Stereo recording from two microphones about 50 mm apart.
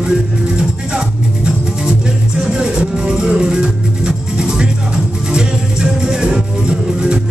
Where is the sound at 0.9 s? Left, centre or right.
Centre.